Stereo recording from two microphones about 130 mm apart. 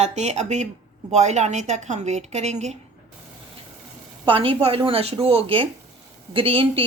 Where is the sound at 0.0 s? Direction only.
60° right (ahead or behind).